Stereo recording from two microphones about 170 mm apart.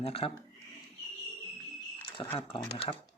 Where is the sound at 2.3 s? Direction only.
35° left (ahead or behind).